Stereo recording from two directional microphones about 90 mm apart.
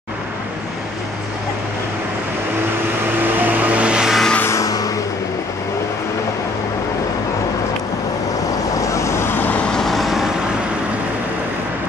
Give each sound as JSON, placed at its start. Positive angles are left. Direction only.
{"t": 3.2, "sound": "vehicle", "side_deg": -20}
{"t": 4.4, "sound": "vehicle", "side_deg": 30}
{"t": 4.6, "sound": "vehicle", "side_deg": 40}
{"t": 8.7, "sound": "vehicle", "side_deg": 35}
{"t": 9.7, "sound": "vehicle", "side_deg": 5}